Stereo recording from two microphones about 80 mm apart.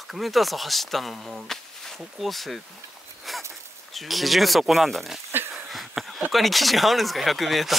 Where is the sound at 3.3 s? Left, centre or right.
Centre.